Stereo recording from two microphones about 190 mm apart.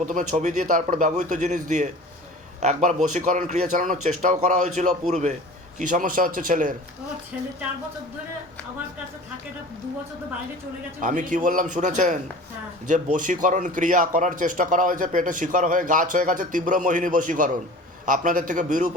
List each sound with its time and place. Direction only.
0.0 s speech: 40° right (ahead or behind)
11.0 s speech: 45° right (ahead or behind)